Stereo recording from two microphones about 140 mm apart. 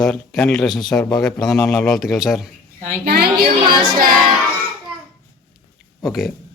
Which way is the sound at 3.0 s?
90° right.